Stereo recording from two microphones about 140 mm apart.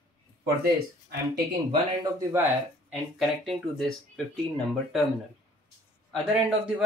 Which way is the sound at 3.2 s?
Centre (ahead or behind).